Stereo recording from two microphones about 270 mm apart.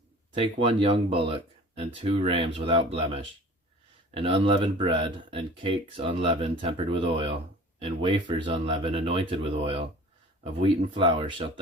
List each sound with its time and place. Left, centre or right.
0.3 s speech: centre